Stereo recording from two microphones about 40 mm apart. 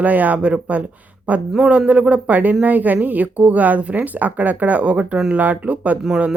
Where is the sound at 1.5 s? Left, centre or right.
Right.